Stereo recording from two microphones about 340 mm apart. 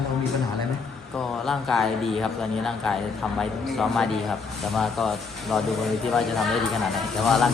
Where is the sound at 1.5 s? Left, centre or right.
Centre.